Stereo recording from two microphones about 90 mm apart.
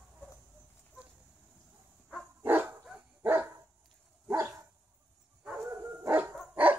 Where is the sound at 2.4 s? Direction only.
20° right (ahead or behind).